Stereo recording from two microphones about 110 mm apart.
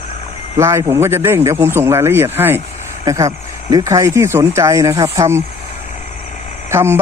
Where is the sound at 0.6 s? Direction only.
25° right (ahead or behind).